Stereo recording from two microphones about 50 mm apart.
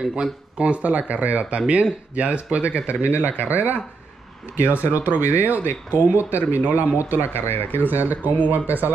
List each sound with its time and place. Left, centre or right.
0.0 s speech: centre; by 8.9 s right